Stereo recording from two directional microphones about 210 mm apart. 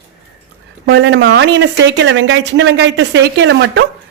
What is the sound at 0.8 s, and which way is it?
Speech, 55° right (ahead or behind).